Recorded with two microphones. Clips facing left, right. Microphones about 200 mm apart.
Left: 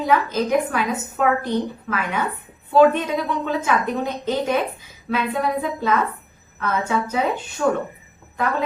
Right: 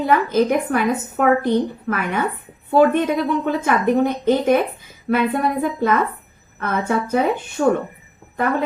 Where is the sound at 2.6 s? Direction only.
55° right (ahead or behind).